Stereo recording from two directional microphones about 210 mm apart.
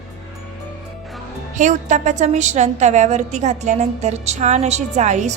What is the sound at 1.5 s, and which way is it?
A woman's voice, 35° right (ahead or behind).